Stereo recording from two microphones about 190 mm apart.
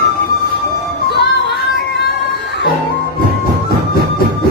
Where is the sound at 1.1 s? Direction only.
65° left (ahead or behind).